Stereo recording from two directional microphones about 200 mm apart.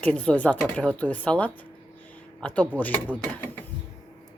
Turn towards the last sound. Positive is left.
turn(degrees=10)  # may be behind; listen again after turning